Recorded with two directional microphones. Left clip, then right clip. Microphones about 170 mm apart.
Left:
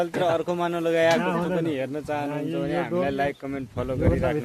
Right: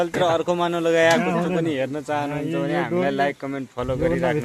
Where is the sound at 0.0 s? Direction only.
5° left (ahead or behind).